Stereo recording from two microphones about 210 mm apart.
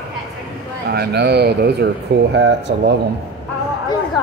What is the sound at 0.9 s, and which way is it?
A man's voice, 50° right (ahead or behind).